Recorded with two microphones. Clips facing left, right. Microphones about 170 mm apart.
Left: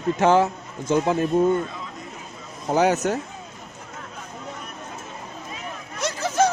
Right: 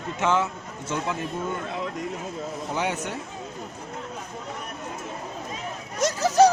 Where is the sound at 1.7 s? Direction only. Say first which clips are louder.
Right 6 dB; 70° right (ahead or behind).